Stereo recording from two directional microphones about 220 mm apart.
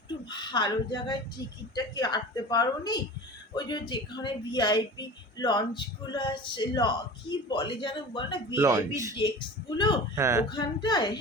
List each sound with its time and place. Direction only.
0.1 s speech: 20° left (ahead or behind)
8.5 s speech: 15° right (ahead or behind)
9.7 s speech: 20° left (ahead or behind)
10.2 s speech: 15° right (ahead or behind)
10.5 s speech: 20° left (ahead or behind)